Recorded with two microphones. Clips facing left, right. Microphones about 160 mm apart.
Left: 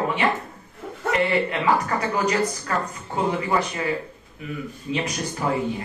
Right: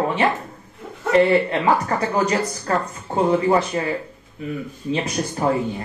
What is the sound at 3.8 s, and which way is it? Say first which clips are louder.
Speech: right 3 dB; 35° right (ahead or behind).